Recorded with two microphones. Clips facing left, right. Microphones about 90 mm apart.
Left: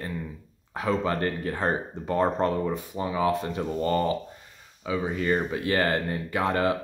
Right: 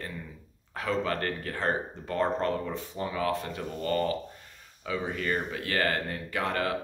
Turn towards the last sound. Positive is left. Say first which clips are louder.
# left 5 dB
turn(degrees=20)  # may be behind; listen again after turning